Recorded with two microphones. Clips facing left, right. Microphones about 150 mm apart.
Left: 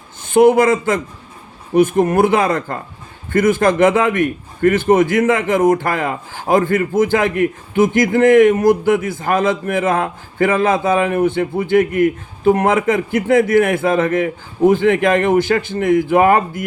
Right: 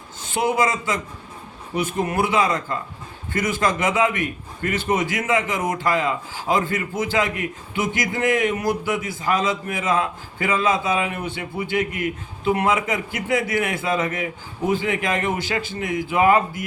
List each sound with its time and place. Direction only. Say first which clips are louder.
0.2 s a man's voice: left 10 dB; 55° left (ahead or behind)